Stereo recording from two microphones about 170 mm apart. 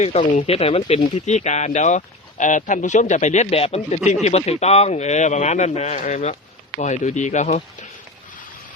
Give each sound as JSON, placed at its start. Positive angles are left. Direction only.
{"t": 0.0, "sound": "speech", "side_deg": 40}